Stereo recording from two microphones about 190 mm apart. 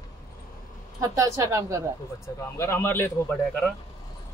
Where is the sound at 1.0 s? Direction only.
15° right (ahead or behind).